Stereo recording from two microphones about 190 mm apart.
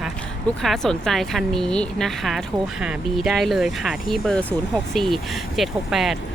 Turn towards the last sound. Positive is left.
turn(degrees=0)  # may be behind; listen again after turning